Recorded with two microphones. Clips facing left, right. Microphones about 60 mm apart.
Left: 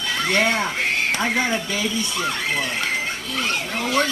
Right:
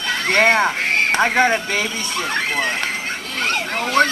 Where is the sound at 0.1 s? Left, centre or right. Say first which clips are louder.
Right 5 dB; right.